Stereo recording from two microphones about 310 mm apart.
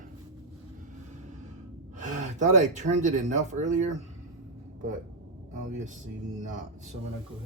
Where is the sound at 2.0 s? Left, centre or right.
Right.